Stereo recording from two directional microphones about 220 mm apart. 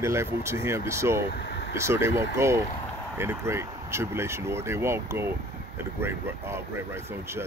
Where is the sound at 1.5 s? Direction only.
50° left (ahead or behind).